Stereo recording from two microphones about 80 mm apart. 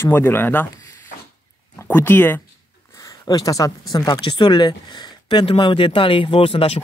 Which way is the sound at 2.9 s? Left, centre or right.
Left.